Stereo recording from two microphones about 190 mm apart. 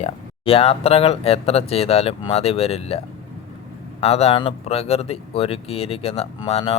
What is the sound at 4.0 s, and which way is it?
Speech, 30° left (ahead or behind).